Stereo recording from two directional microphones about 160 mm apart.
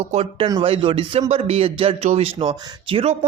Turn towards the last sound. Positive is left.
turn(degrees=-35)  # may be behind; listen again after turning